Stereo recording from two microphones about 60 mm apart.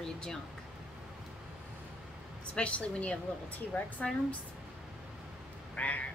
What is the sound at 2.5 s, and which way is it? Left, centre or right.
A woman's voice, centre.